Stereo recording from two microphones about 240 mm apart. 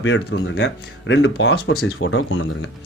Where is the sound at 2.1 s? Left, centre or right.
Left.